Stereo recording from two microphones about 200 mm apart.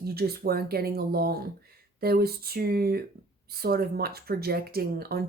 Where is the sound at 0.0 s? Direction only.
50° right (ahead or behind).